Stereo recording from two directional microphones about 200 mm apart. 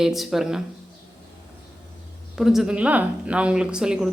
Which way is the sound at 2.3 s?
Centre (ahead or behind).